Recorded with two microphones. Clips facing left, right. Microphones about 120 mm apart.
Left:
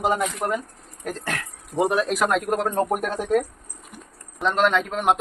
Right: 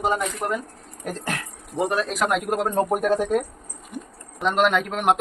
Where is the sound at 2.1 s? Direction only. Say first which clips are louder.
Left 1 dB; centre (ahead or behind).